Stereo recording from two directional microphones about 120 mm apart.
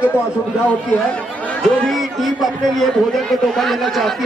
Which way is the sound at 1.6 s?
5° left (ahead or behind).